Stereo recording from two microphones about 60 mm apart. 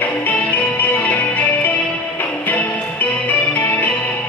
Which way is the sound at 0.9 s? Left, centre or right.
Left.